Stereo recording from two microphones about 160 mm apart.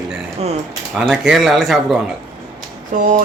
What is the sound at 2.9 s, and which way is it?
Speech, 55° right (ahead or behind).